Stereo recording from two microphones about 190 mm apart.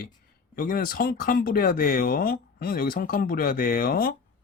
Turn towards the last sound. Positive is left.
turn(degrees=50)  # may be behind; listen again after turning